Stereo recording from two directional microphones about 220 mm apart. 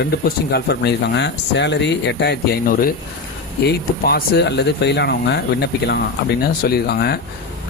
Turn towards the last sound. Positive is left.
turn(degrees=45)  # may be behind; listen again after turning